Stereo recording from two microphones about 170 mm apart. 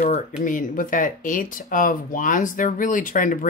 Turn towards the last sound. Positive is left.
turn(degrees=50)  # may be behind; listen again after turning